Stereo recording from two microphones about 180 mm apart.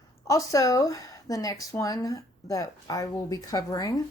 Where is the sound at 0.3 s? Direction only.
20° left (ahead or behind).